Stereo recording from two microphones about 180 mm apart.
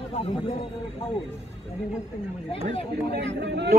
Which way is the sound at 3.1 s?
75° right (ahead or behind).